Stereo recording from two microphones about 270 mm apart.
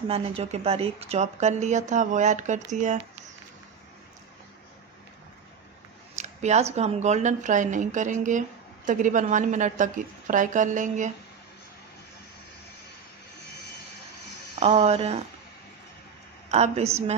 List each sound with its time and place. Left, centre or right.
0.1 s speech: right
6.1 s speech: right
14.5 s speech: right
16.4 s speech: right